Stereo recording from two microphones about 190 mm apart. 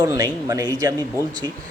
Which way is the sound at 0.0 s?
15° right (ahead or behind).